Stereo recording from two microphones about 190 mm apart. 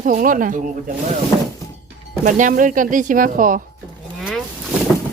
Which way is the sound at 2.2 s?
45° right (ahead or behind).